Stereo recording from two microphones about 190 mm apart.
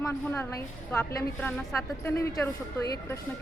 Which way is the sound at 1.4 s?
10° left (ahead or behind).